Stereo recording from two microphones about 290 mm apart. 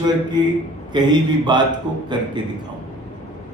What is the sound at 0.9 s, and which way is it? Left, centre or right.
Speech, centre.